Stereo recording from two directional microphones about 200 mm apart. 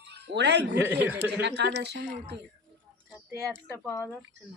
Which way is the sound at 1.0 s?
10° right (ahead or behind).